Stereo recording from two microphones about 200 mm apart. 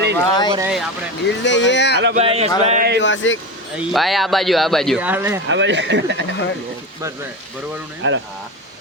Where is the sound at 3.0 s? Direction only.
70° left (ahead or behind).